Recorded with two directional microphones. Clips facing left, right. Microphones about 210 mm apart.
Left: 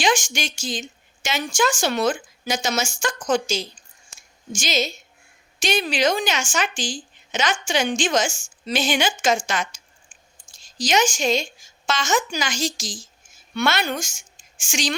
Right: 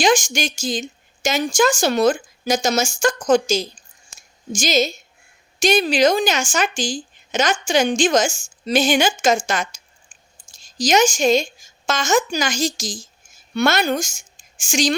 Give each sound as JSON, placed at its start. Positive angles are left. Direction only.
{"t": 0.0, "sound": "speech", "side_deg": -40}
{"t": 10.5, "sound": "a woman's voice", "side_deg": -40}